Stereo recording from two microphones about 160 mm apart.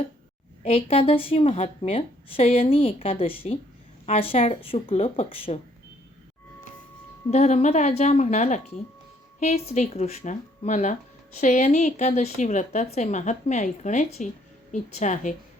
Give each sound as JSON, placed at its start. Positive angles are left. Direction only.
{"t": 0.6, "sound": "speech", "side_deg": 40}
{"t": 7.3, "sound": "a woman's voice", "side_deg": 45}